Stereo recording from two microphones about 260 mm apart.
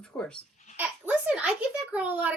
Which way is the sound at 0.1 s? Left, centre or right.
Centre.